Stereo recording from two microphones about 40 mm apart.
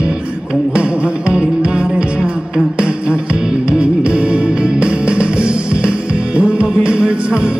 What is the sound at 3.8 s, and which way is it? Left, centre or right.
Music, right.